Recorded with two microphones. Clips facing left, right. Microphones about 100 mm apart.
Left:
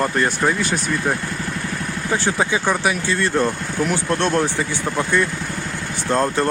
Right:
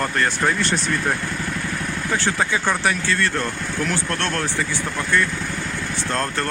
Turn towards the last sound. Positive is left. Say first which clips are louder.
# left 5 dB
turn(degrees=15)  # may be behind; listen again after turning